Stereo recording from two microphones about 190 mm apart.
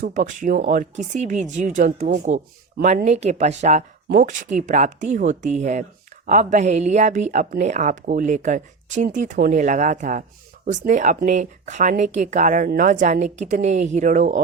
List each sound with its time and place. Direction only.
0.0 s a woman's voice: 40° right (ahead or behind)